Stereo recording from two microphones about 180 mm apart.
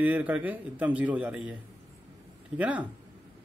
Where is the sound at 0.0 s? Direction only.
10° right (ahead or behind).